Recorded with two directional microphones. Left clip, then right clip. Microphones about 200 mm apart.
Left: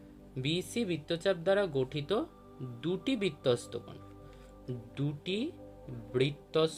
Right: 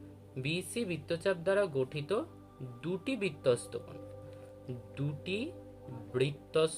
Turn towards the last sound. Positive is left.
turn(degrees=20)  # may be behind; listen again after turning